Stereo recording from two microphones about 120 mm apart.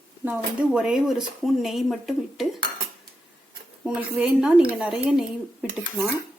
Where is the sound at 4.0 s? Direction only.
5° right (ahead or behind).